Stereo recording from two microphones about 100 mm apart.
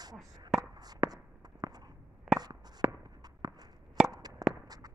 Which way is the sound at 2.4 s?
40° right (ahead or behind).